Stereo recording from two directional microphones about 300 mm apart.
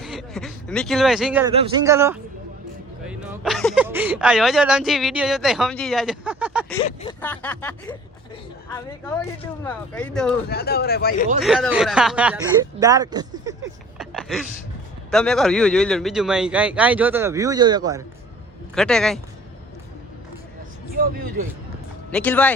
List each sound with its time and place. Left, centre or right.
0.0 s a man's voice: centre
1.5 s speech: centre
6.8 s speech: centre
7.2 s speech: centre
10.5 s speech: left
11.3 s speech: centre
14.0 s a sound: centre
15.1 s speech: centre
18.7 s speech: centre
20.9 s speech: right
22.1 s speech: centre